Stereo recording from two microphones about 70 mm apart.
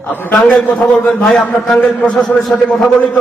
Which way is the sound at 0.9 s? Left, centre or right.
Centre.